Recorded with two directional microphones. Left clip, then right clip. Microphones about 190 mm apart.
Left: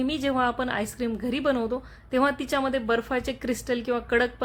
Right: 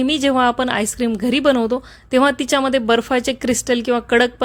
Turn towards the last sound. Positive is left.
turn(degrees=-40)  # may be behind; listen again after turning